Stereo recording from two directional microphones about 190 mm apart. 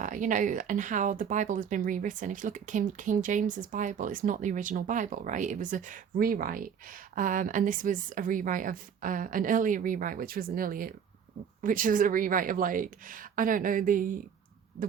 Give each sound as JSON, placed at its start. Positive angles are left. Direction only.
{"t": 0.0, "sound": "speech", "side_deg": -45}